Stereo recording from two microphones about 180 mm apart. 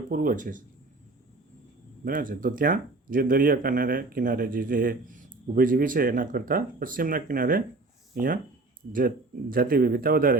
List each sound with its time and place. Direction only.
0.1 s speech: 50° right (ahead or behind)
2.0 s speech: 50° right (ahead or behind)